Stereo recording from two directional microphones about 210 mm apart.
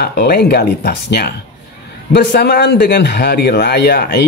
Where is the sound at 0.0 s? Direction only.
50° left (ahead or behind).